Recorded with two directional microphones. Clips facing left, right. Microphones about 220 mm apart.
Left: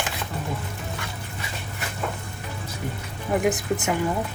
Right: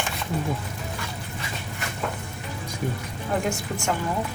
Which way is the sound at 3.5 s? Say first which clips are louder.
Left 5 dB; 20° left (ahead or behind).